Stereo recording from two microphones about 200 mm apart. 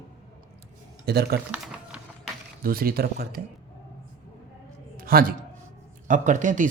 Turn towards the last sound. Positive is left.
turn(degrees=-40)  # may be behind; listen again after turning